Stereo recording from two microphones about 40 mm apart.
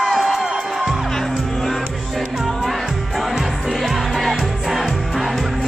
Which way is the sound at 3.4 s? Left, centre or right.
Centre.